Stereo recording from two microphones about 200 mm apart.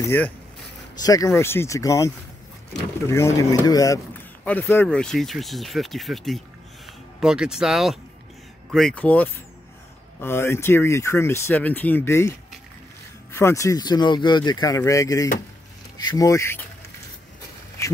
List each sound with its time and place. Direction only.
0.0 s speech: 10° left (ahead or behind)